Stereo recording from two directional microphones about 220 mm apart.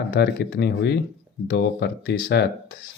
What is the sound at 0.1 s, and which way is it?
Speech, 45° left (ahead or behind).